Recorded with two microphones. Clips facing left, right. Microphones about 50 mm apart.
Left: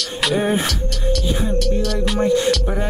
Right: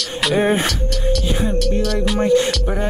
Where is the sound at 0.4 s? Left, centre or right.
Right.